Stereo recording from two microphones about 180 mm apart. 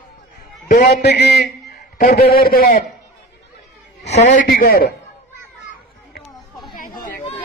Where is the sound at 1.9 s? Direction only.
50° left (ahead or behind).